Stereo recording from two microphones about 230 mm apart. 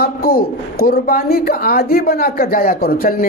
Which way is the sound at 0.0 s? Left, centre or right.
Left.